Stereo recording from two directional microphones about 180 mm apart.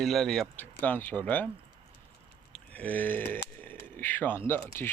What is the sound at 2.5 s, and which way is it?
Speech, 10° left (ahead or behind).